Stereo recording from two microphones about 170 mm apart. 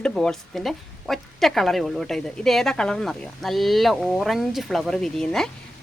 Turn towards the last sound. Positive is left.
turn(degrees=5)  # may be behind; listen again after turning